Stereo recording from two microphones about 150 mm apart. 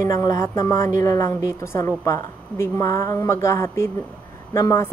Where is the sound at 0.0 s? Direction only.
20° left (ahead or behind).